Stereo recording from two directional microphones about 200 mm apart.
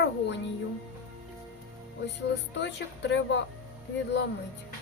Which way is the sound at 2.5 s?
60° left (ahead or behind).